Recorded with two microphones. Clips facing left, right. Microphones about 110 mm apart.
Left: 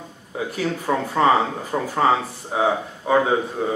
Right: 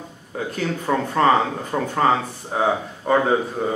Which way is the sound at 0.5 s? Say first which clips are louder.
Even; 5° left (ahead or behind).